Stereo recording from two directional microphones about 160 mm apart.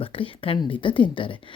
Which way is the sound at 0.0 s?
35° left (ahead or behind).